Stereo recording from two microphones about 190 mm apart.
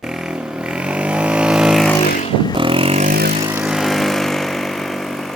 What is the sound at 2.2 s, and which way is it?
Vehicle, 25° left (ahead or behind).